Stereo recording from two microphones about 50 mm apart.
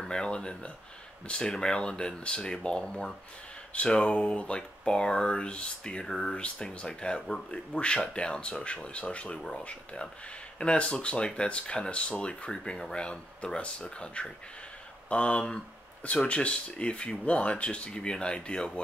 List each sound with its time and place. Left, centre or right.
0.0 s speech: centre
6.4 s speech: left